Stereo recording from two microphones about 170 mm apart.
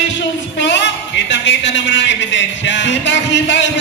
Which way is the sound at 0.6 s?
90° left.